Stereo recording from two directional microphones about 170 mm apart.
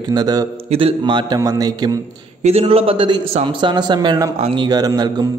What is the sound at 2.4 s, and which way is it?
A man's voice, 35° right (ahead or behind).